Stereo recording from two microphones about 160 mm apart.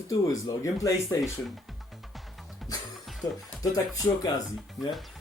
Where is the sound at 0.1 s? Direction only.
20° left (ahead or behind).